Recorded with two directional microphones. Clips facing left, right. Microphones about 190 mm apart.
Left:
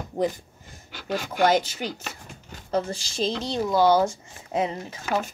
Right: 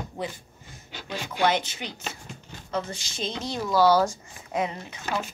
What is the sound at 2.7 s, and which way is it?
Speech, 35° left (ahead or behind).